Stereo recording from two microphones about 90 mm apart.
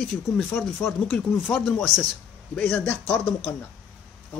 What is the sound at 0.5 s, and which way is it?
Speech, 25° left (ahead or behind).